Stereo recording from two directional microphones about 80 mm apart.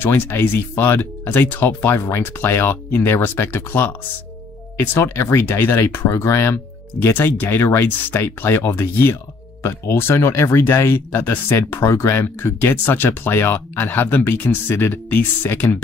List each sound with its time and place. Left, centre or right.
0.0 s speech: left